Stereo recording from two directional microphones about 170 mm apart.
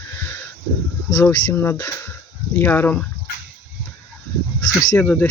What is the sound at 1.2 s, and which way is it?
Speech, 15° left (ahead or behind).